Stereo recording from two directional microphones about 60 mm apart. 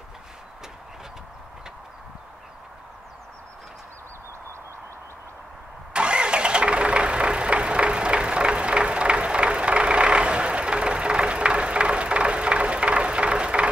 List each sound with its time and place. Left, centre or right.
5.9 s vehicle: centre